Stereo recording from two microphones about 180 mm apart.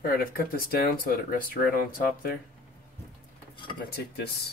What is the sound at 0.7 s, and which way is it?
Speech, 55° left (ahead or behind).